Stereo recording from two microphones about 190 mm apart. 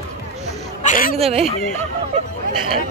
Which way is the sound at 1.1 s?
30° right (ahead or behind).